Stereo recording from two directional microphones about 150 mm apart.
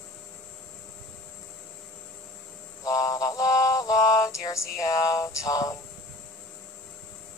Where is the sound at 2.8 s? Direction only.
20° left (ahead or behind).